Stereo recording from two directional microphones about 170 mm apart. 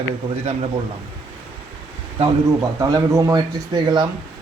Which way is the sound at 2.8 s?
20° right (ahead or behind).